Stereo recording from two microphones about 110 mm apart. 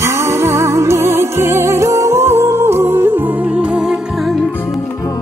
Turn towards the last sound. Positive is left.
turn(degrees=-5)  # may be behind; listen again after turning